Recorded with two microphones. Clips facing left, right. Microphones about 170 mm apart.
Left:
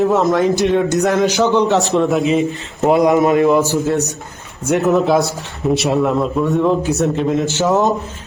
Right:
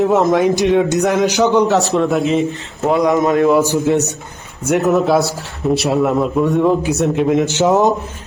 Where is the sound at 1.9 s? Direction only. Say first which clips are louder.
Even; centre (ahead or behind).